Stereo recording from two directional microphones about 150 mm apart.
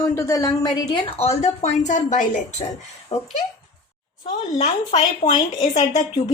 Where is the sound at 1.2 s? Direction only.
50° left (ahead or behind).